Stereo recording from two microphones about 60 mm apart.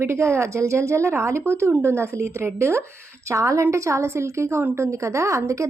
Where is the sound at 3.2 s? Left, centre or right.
Right.